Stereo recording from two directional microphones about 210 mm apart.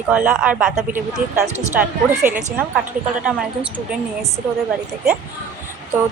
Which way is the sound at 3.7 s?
5° right (ahead or behind).